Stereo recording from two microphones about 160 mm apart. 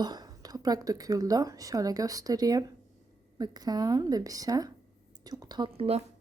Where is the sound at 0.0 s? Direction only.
25° right (ahead or behind).